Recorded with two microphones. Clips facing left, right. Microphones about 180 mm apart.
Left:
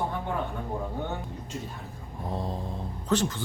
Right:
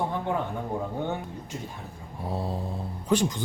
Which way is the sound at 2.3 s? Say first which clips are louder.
Right 2 dB; 10° right (ahead or behind).